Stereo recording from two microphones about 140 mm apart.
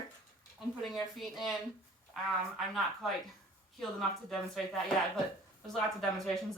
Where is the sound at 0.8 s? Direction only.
Centre (ahead or behind).